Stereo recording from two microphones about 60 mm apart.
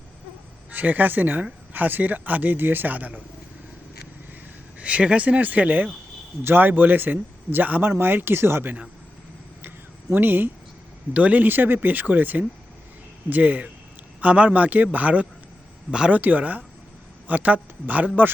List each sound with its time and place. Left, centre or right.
0.7 s a man's voice: right
4.8 s a man's voice: right
9.6 s a sound: right
11.1 s a man's voice: right